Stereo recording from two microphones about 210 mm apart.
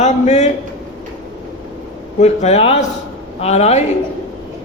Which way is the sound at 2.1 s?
30° left (ahead or behind).